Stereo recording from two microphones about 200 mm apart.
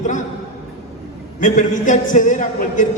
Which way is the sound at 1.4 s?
40° left (ahead or behind).